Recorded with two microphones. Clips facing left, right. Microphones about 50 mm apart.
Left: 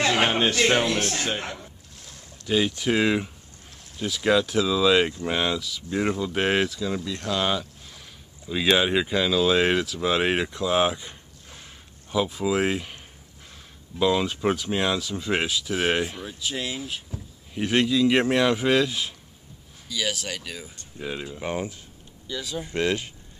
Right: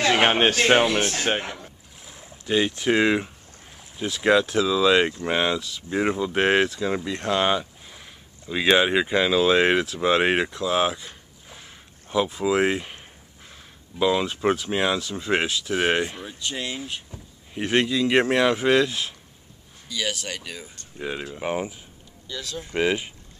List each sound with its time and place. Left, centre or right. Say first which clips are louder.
0.0 s a man's voice: right 3 dB; right
0.8 s speech: right 2 dB; centre
1.6 s boat: right 1 dB; centre
2.5 s speech: right 2 dB; centre
4.5 s speech: right 1 dB; centre
6.7 s speech: right 3 dB; right; by 9.1 s centre
9.1 s speech: right 3 dB; centre
10.5 s speech: even; centre
11.4 s a sound: right 2 dB; centre
13.9 s speech: even; centre
21.0 s speech: right 2 dB; centre
22.3 s speech: left 2 dB; centre
22.7 s speech: right 3 dB; centre